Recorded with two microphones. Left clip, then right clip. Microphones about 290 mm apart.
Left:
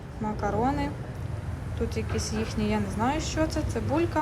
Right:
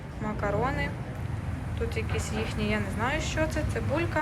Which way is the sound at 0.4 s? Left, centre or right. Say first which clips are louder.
Left 1 dB; centre.